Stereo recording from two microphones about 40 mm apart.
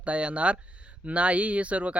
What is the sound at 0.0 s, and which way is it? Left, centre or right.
Speech, right.